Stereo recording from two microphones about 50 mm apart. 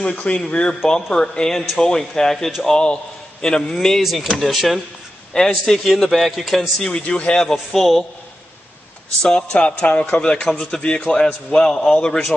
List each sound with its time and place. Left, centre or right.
0.0 s speech: left
0.8 s speech: centre
5.3 s speech: centre
6.8 s speech: left
7.5 s speech: centre
9.2 s speech: centre
10.4 s speech: centre